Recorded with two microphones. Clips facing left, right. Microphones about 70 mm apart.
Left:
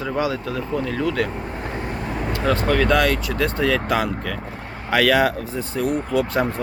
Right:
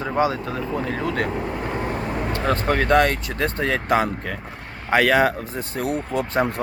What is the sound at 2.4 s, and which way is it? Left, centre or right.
Speech, right.